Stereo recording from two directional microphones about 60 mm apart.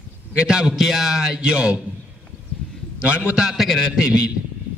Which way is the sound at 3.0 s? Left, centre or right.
Right.